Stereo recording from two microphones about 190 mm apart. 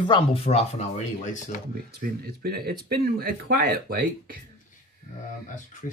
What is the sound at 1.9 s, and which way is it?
Speech, 55° right (ahead or behind).